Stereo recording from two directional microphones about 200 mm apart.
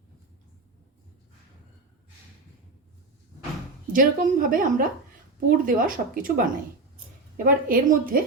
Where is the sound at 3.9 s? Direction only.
45° right (ahead or behind).